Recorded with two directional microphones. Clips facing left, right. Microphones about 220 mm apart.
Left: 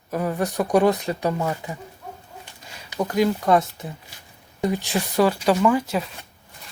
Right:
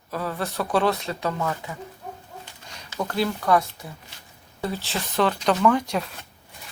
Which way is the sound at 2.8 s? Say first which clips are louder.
Left 5 dB; 10° left (ahead or behind).